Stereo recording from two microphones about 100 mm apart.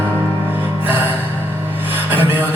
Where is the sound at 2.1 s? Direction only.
20° right (ahead or behind).